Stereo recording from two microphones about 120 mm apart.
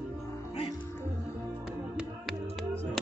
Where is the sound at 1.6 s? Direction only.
5° right (ahead or behind).